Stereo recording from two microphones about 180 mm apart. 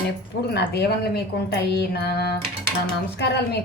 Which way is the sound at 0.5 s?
65° left (ahead or behind).